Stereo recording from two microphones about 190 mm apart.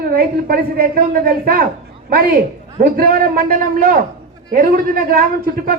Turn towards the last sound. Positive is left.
turn(degrees=-50)  # may be behind; listen again after turning